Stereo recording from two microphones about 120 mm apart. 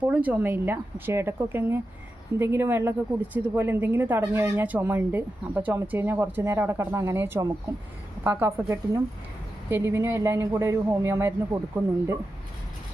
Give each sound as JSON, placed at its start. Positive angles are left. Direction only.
{"t": 0.0, "sound": "speech", "side_deg": -15}
{"t": 8.6, "sound": "speech", "side_deg": -30}